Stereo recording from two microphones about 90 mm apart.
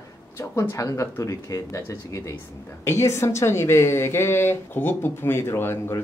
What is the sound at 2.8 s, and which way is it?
A woman's voice, 35° left (ahead or behind).